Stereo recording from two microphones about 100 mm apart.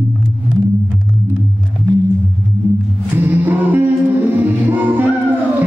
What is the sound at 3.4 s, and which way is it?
Music, 20° right (ahead or behind).